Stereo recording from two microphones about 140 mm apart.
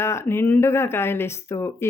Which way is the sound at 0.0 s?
20° left (ahead or behind).